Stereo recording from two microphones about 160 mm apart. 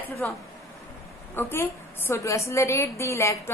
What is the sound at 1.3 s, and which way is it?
A woman's voice, 15° left (ahead or behind).